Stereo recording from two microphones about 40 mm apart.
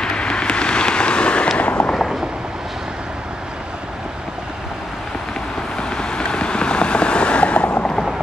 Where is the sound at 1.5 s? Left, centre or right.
Left.